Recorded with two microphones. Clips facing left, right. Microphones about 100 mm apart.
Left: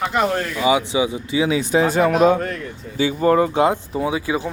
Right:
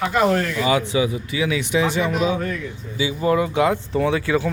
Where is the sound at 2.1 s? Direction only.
65° left (ahead or behind).